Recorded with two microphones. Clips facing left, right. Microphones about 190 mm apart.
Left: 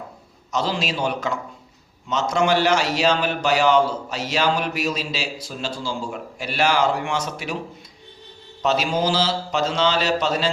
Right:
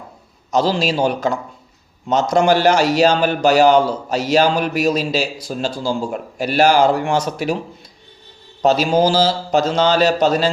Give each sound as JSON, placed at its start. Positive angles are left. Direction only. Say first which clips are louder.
{"t": 0.5, "sound": "a man's voice", "louder": "right 7 dB", "side_deg": -35}
{"t": 8.6, "sound": "a man's voice", "louder": "right 7 dB", "side_deg": -40}